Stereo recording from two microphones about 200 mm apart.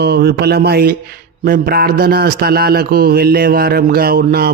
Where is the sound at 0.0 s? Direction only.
55° right (ahead or behind).